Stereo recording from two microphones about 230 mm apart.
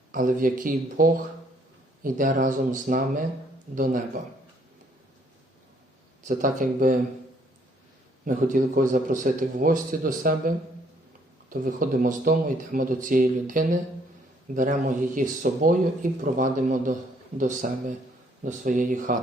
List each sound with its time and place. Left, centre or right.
0.1 s speech: right
6.2 s speech: right
8.2 s speech: right